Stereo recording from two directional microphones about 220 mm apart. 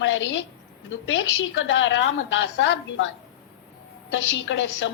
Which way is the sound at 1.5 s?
60° left (ahead or behind).